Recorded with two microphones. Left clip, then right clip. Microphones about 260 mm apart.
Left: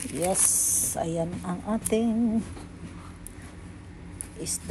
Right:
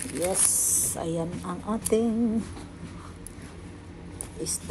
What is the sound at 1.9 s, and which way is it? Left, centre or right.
Speech, centre.